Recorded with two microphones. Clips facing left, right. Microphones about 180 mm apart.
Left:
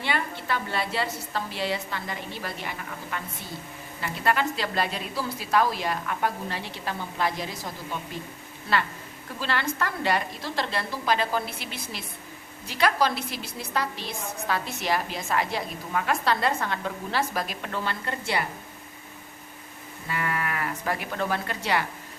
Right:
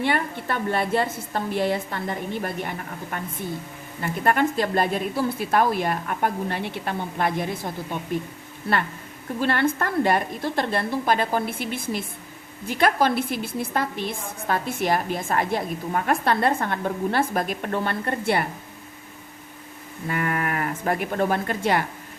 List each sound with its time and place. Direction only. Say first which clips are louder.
0.0 s a woman's voice: right 5 dB; 55° right (ahead or behind)
9.4 s a woman's voice: right 6 dB; 55° right (ahead or behind)
20.1 s speech: right 4 dB; 45° right (ahead or behind)